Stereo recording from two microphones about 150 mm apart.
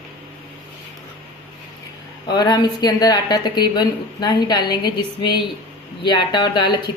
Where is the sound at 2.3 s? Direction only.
25° left (ahead or behind).